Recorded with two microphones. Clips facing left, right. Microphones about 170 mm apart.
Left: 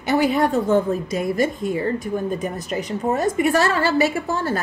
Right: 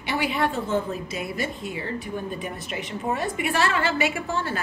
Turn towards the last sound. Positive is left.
turn(degrees=40)  # may be behind; listen again after turning